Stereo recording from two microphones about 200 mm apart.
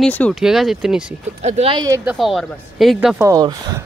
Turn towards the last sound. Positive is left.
turn(degrees=-20)  # may be behind; listen again after turning